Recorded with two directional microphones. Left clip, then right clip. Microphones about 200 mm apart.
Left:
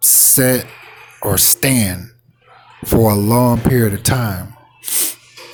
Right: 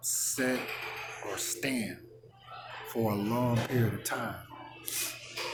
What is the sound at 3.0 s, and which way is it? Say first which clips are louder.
Speech: left 16 dB; 50° left (ahead or behind).